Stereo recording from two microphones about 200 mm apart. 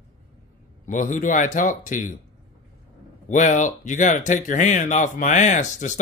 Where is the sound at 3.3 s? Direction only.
40° left (ahead or behind).